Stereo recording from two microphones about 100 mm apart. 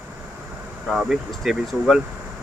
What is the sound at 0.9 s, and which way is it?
Speech, centre (ahead or behind).